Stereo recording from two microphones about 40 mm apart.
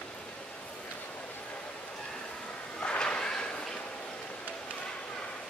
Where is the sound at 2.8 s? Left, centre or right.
Left.